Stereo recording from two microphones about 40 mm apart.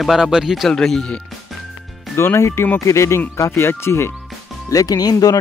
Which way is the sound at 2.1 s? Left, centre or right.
Left.